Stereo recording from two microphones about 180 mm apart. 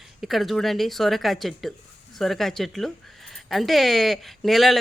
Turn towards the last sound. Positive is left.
turn(degrees=0)  # may be behind; listen again after turning